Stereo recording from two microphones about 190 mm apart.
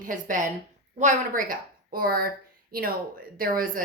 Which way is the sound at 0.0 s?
45° right (ahead or behind).